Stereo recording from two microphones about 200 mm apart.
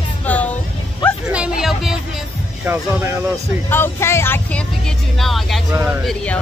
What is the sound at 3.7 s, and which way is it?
Speech, 10° left (ahead or behind).